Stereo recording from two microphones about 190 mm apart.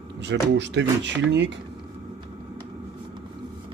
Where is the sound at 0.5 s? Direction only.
70° right (ahead or behind).